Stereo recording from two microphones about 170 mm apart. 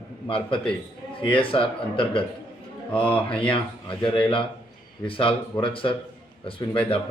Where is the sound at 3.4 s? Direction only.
30° left (ahead or behind).